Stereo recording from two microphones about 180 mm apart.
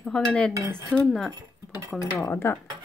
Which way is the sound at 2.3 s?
15° left (ahead or behind).